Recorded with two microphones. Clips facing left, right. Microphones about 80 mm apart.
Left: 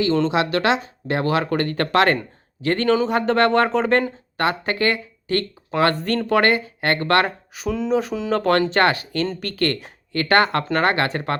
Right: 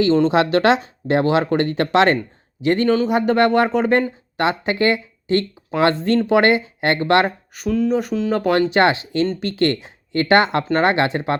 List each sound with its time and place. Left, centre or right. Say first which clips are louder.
0.3 s speech: right 4 dB; right; by 4.0 s centre
4.4 s speech: right 2 dB; right
7.5 s speech: right 2 dB; centre